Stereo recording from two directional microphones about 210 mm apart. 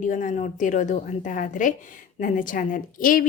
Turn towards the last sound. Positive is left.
turn(degrees=40)  # may be behind; listen again after turning